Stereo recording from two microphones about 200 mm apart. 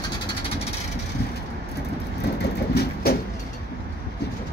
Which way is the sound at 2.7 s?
50° left (ahead or behind).